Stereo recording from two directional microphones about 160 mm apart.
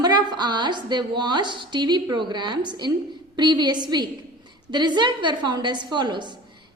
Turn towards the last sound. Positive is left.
turn(degrees=-30)  # may be behind; listen again after turning